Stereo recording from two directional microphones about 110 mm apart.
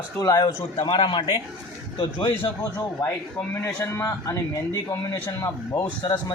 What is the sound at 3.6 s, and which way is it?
Speech, 25° left (ahead or behind).